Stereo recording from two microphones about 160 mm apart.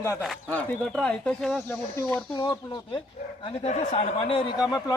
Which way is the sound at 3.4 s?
45° left (ahead or behind).